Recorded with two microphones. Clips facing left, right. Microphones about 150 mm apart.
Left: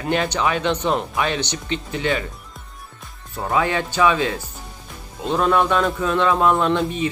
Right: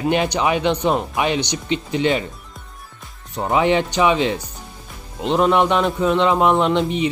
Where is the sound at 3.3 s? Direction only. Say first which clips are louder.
Right 4 dB; 20° right (ahead or behind).